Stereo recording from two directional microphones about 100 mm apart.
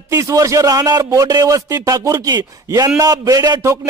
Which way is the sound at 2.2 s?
45° right (ahead or behind).